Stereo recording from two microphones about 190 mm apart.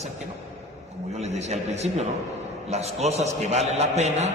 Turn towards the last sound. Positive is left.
turn(degrees=-35)  # may be behind; listen again after turning